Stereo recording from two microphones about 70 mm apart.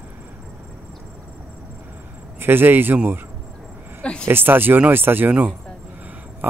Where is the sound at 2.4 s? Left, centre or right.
Right.